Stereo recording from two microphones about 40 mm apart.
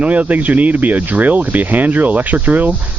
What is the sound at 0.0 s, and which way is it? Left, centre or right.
Speech, right.